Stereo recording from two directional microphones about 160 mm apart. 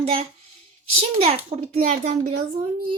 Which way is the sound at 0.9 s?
40° right (ahead or behind).